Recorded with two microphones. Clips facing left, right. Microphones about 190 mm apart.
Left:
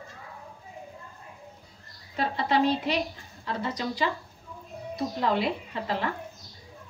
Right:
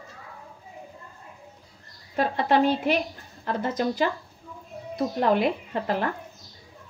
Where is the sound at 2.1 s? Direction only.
50° right (ahead or behind).